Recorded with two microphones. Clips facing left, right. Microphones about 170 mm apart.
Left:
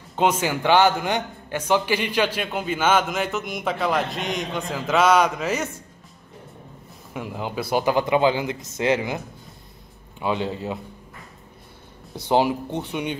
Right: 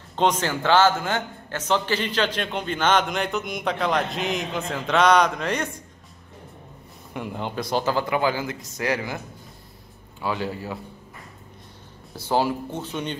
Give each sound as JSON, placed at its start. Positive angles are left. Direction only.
{"t": 0.1, "sound": "a man's voice", "side_deg": 10}
{"t": 7.2, "sound": "a man's voice", "side_deg": 5}
{"t": 10.2, "sound": "a man's voice", "side_deg": 20}
{"t": 12.2, "sound": "speech", "side_deg": 20}